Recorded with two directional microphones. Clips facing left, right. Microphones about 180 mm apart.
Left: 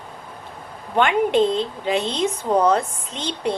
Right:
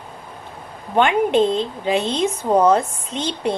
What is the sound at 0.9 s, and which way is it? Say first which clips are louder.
A woman's voice: right 2 dB; 15° right (ahead or behind).